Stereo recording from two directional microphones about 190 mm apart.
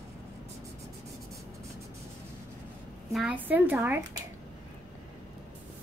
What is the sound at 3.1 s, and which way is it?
Speech, 5° right (ahead or behind).